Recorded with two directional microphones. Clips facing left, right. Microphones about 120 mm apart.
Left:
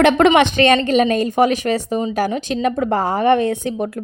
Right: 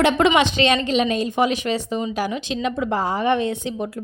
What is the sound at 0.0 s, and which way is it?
A woman's voice, 60° left (ahead or behind).